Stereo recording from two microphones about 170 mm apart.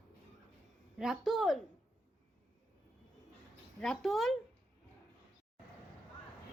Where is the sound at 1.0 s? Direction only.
Centre (ahead or behind).